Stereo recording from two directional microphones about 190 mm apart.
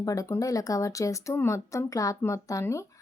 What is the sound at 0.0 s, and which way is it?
Speech, 15° left (ahead or behind).